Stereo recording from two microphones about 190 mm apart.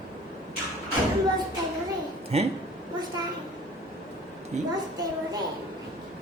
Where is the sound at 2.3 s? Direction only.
35° right (ahead or behind).